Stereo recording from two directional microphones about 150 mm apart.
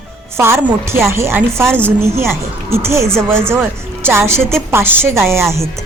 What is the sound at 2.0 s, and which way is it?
A woman's voice, 15° right (ahead or behind).